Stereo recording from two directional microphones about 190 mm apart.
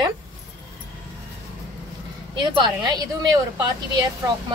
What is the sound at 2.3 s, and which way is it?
Speech, 25° right (ahead or behind).